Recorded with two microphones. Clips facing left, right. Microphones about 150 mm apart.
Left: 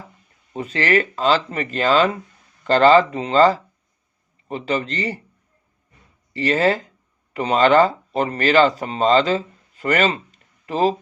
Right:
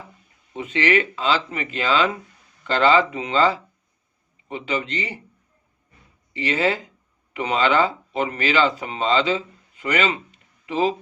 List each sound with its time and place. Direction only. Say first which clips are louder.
0.5 s speech: left 1 dB; 40° left (ahead or behind)
6.3 s speech: left 4 dB; 40° left (ahead or behind)